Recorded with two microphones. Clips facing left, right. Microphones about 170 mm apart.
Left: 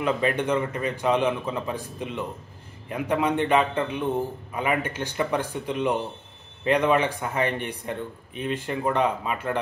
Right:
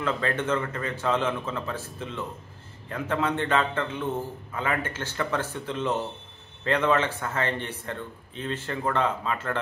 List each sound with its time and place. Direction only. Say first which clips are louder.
0.0 s a man's voice: left 3 dB; 15° left (ahead or behind)